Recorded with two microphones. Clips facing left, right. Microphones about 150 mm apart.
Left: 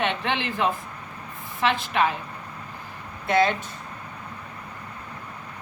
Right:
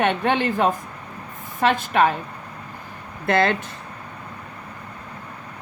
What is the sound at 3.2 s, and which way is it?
Speech, 60° right (ahead or behind).